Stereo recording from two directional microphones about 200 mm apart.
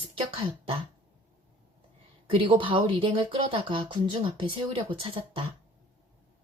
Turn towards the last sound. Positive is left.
turn(degrees=-25)  # may be behind; listen again after turning